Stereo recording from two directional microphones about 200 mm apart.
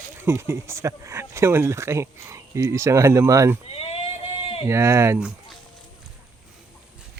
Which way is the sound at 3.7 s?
30° left (ahead or behind).